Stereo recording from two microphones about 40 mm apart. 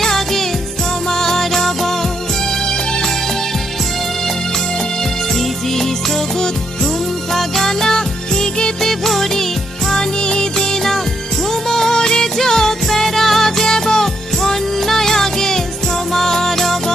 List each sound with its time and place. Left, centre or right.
0.0 s music: centre
5.4 s music: centre
8.9 s music: centre
9.9 s music: centre